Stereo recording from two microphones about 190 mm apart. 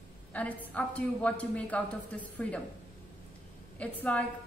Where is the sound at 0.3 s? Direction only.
5° left (ahead or behind).